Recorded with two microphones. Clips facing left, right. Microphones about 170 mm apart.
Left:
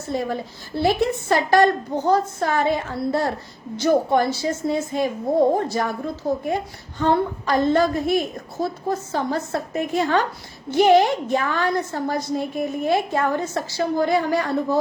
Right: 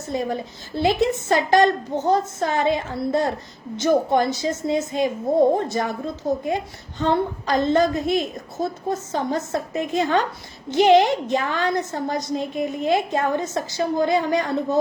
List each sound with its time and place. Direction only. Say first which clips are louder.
0.1 s a woman's voice: even; 20° right (ahead or behind)